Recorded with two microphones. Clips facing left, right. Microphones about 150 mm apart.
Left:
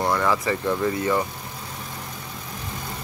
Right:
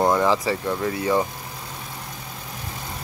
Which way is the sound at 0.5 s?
5° right (ahead or behind).